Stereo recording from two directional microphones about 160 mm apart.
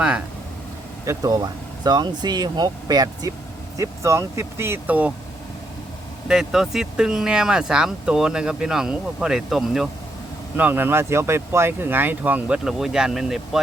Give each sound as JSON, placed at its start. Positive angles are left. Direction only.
{"t": 1.0, "sound": "speech", "side_deg": -20}
{"t": 6.2, "sound": "speech", "side_deg": -5}